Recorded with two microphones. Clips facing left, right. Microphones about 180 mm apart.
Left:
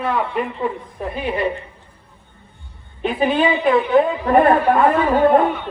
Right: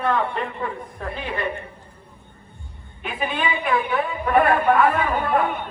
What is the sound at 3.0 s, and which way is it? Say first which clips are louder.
A woman's voice: left 9 dB; 30° left (ahead or behind).